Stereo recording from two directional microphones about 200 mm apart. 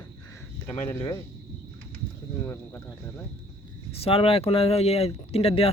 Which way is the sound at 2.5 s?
15° left (ahead or behind).